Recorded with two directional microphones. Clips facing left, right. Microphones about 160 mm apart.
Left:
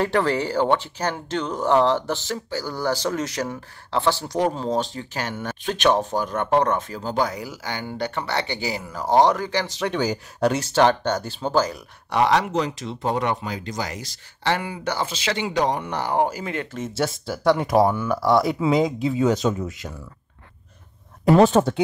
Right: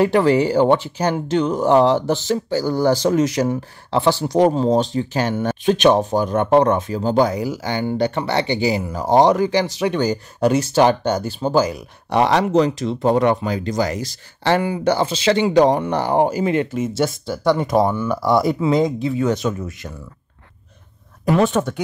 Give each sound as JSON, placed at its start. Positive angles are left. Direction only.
{"t": 0.0, "sound": "speech", "side_deg": -10}
{"t": 9.9, "sound": "speech", "side_deg": 0}
{"t": 12.1, "sound": "speech", "side_deg": -30}
{"t": 16.9, "sound": "speech", "side_deg": 5}
{"t": 21.3, "sound": "speech", "side_deg": 35}